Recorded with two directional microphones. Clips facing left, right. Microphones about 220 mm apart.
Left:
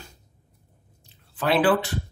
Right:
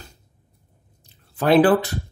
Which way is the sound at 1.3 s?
40° right (ahead or behind).